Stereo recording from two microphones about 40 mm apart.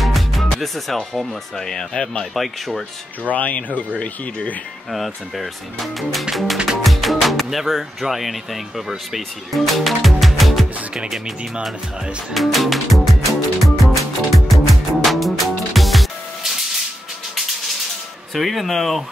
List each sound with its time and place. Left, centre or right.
0.0 s speech: centre
2.3 s speech: centre
3.3 s speech: left
4.9 s speech: centre
6.8 s music: centre
7.5 s speech: centre
12.4 s music: centre
18.3 s speech: centre